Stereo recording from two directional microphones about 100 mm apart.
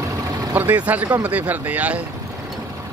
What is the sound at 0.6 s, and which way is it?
Speech, 15° right (ahead or behind).